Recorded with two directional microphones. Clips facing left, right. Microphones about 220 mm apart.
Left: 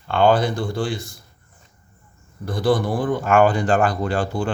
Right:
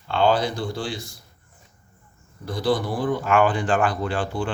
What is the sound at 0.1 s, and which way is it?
Speech, 50° left (ahead or behind).